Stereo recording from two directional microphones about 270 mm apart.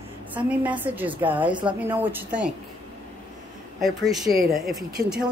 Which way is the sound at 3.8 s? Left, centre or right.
Centre.